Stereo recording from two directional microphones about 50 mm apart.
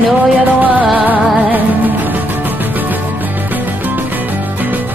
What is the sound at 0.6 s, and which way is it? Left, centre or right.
Music, right.